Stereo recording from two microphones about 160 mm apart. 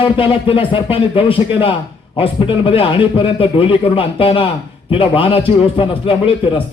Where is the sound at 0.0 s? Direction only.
35° left (ahead or behind).